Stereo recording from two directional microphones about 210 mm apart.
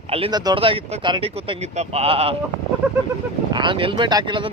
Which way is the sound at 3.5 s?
25° right (ahead or behind).